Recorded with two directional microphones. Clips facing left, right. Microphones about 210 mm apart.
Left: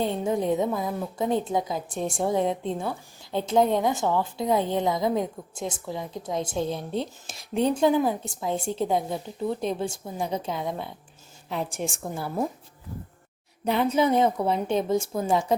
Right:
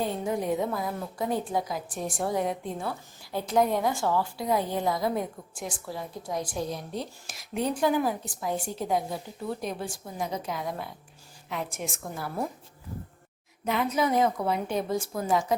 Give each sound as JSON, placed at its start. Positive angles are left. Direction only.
{"t": 0.0, "sound": "a woman's voice", "side_deg": 25}
{"t": 13.7, "sound": "a woman's voice", "side_deg": 30}